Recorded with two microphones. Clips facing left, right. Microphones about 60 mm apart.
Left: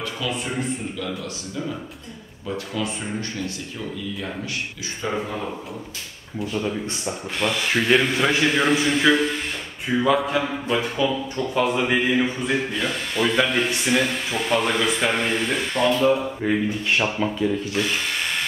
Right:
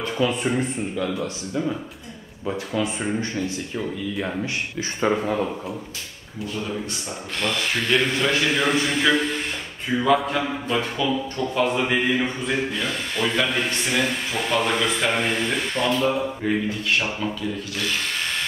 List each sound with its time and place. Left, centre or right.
0.0 s a sound: right
2.4 s speech: right
5.0 s speech: right
7.3 s speech: centre
16.6 s speech: left
18.0 s electric toothbrush: centre